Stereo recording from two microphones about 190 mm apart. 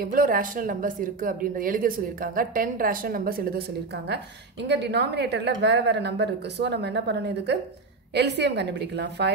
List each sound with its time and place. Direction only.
0.0 s a woman's voice: 50° right (ahead or behind); by 9.3 s 65° right (ahead or behind)